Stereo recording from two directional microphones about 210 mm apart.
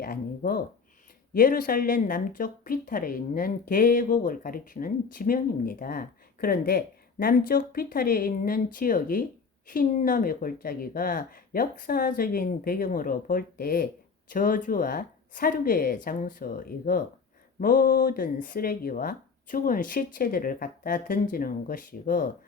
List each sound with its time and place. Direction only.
0.0 s a woman's voice: 45° left (ahead or behind)